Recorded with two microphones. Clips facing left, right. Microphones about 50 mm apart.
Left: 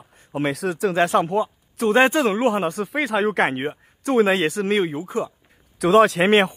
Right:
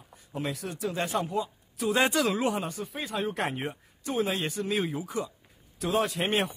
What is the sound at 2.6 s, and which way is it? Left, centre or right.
Speech, left.